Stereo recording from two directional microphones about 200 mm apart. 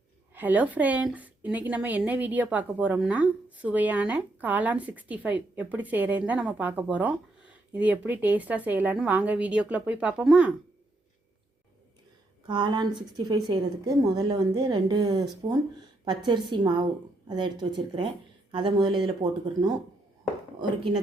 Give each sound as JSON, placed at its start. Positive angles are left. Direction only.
{"t": 0.3, "sound": "a woman's voice", "side_deg": -10}
{"t": 12.5, "sound": "a woman's voice", "side_deg": -25}